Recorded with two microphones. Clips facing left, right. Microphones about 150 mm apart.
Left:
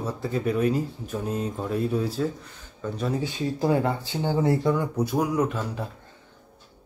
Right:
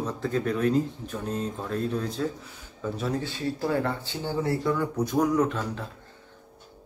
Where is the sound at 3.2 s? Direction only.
15° left (ahead or behind).